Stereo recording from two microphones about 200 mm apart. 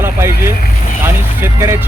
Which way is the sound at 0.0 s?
10° right (ahead or behind).